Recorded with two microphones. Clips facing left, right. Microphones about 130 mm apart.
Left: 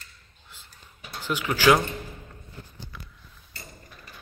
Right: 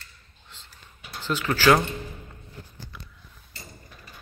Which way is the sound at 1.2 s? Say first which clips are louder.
Even; 15° left (ahead or behind).